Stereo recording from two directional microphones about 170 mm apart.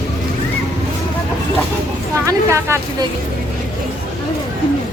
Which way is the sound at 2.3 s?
15° right (ahead or behind).